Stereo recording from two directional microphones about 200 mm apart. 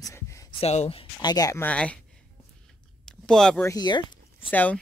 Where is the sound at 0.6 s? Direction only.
30° left (ahead or behind); by 2.0 s 5° left (ahead or behind).